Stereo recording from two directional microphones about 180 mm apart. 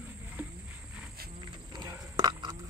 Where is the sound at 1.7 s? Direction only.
20° right (ahead or behind).